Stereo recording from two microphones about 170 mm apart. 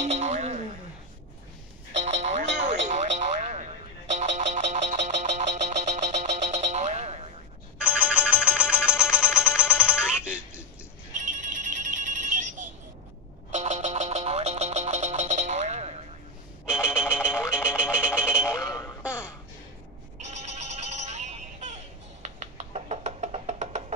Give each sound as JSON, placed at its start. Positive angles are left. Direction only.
{"t": 0.0, "sound": "music", "side_deg": -40}
{"t": 2.0, "sound": "telephone", "side_deg": -40}
{"t": 2.5, "sound": "music", "side_deg": -45}
{"t": 7.8, "sound": "music", "side_deg": -5}
{"t": 12.3, "sound": "ringtone", "side_deg": -45}
{"t": 13.5, "sound": "music", "side_deg": -45}
{"t": 16.6, "sound": "music", "side_deg": -5}
{"t": 17.9, "sound": "a sound", "side_deg": -5}
{"t": 19.0, "sound": "music", "side_deg": -5}
{"t": 20.2, "sound": "music", "side_deg": -40}